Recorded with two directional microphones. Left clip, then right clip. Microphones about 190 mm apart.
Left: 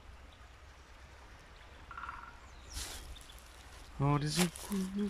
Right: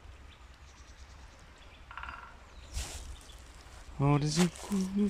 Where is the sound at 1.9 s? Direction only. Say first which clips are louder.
Right 1 dB; 50° right (ahead or behind).